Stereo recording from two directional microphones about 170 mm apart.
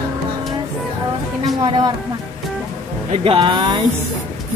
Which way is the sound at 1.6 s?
25° right (ahead or behind).